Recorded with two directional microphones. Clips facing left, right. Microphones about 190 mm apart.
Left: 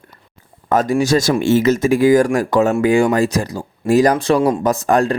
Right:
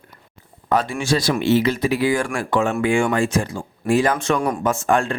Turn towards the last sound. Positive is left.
turn(degrees=40)  # may be behind; listen again after turning